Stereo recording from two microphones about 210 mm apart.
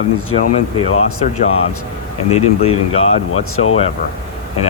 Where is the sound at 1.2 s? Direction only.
30° left (ahead or behind).